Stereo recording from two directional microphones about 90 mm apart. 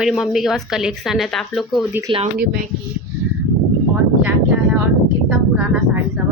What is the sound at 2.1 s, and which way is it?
Speech, 70° right (ahead or behind).